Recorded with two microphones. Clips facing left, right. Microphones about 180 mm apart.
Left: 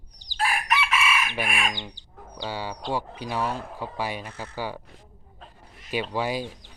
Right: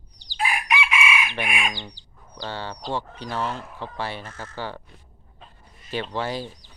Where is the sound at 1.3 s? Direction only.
10° left (ahead or behind).